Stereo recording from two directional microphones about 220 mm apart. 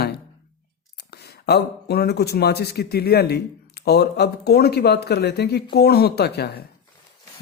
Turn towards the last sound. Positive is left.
turn(degrees=45)  # may be behind; listen again after turning